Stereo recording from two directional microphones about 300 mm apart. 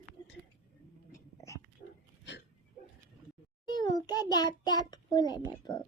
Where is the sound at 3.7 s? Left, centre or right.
Centre.